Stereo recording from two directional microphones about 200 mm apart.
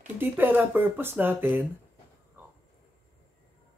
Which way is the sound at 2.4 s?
10° right (ahead or behind).